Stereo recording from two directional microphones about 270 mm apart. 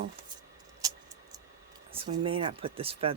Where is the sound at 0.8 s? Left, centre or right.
Centre.